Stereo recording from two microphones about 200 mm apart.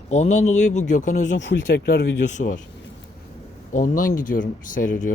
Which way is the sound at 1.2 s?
65° left (ahead or behind).